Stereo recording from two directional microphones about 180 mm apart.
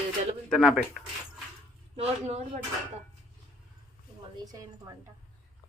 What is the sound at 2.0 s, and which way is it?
Speech, 35° right (ahead or behind).